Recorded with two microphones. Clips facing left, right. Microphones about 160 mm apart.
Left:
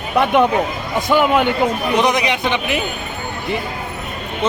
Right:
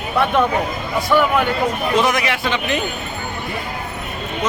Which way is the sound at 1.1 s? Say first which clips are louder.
Left 2 dB; 20° left (ahead or behind).